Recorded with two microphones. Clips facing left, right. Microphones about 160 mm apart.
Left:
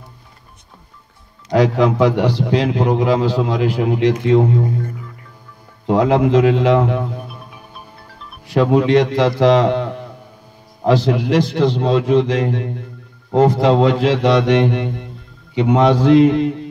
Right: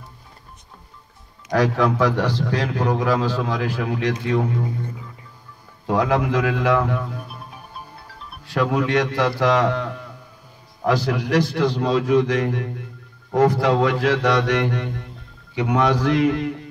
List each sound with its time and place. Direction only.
1.5 s a man's voice: 20° left (ahead or behind)
5.9 s a man's voice: 25° left (ahead or behind)
8.5 s a man's voice: 25° left (ahead or behind)